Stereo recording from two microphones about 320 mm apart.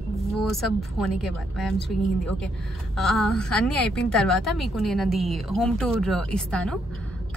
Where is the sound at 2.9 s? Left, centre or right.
Centre.